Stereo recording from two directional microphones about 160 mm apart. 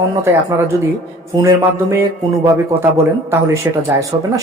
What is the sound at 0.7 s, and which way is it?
Speech, 20° right (ahead or behind).